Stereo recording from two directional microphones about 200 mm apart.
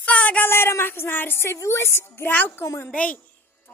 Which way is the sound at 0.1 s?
5° left (ahead or behind).